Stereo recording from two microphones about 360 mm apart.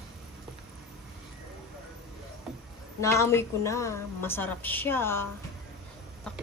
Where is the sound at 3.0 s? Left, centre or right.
Centre.